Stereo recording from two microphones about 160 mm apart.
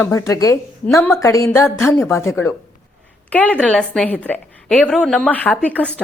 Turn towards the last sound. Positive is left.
turn(degrees=10)  # may be behind; listen again after turning